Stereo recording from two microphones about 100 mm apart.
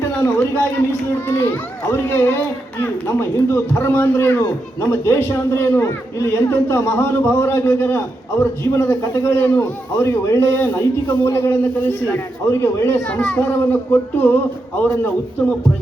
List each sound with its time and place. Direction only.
0.0 s a man's voice: 20° left (ahead or behind)
13.1 s a man's voice: 15° left (ahead or behind)